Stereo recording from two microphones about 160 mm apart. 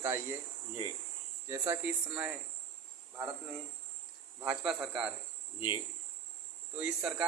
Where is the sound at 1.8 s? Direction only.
5° right (ahead or behind).